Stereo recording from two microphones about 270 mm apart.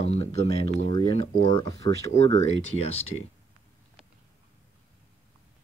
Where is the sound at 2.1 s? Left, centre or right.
Left.